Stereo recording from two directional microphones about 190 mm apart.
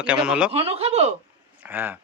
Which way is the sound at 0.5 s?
30° right (ahead or behind).